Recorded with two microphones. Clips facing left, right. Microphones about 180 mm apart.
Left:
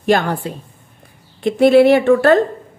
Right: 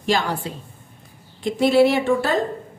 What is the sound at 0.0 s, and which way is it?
A woman's voice, 55° left (ahead or behind).